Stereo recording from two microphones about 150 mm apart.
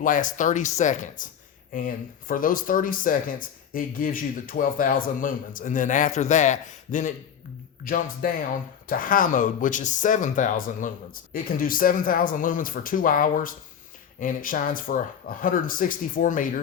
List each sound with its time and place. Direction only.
0.0 s speech: 60° left (ahead or behind)
7.9 s speech: 70° left (ahead or behind)
11.4 s speech: 70° left (ahead or behind)